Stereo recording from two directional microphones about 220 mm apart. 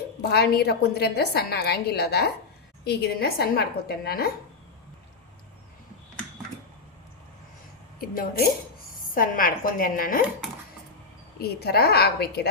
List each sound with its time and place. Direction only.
0.2 s a woman's voice: 45° left (ahead or behind)
7.9 s a woman's voice: 40° left (ahead or behind)
11.3 s a woman's voice: 45° left (ahead or behind)